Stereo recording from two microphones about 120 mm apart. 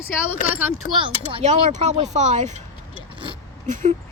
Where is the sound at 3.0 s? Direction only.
45° right (ahead or behind).